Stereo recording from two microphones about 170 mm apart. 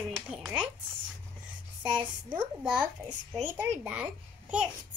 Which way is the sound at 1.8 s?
25° right (ahead or behind).